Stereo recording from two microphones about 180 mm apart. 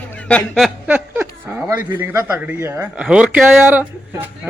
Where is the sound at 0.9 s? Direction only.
10° right (ahead or behind).